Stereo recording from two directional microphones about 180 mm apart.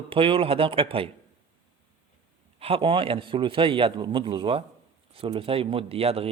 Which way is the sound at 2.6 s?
30° right (ahead or behind).